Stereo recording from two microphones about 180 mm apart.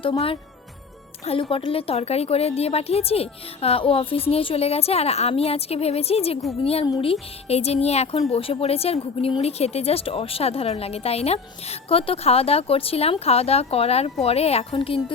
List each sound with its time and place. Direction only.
0.0 s speech: 30° left (ahead or behind)